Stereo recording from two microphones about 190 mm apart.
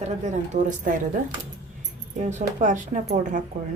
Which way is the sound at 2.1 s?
40° right (ahead or behind).